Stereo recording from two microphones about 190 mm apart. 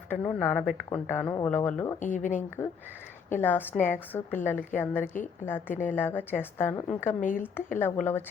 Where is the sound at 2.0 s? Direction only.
40° left (ahead or behind).